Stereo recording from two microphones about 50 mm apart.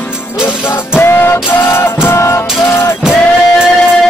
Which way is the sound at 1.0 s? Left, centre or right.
Left.